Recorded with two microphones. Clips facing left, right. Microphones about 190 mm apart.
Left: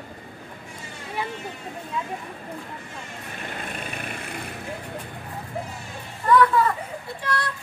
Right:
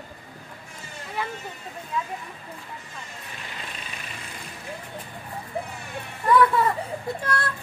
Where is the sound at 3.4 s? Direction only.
55° left (ahead or behind).